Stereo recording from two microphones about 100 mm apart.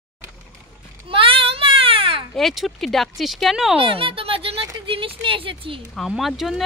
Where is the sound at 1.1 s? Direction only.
65° right (ahead or behind).